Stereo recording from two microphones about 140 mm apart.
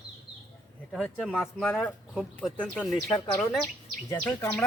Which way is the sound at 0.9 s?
Centre (ahead or behind).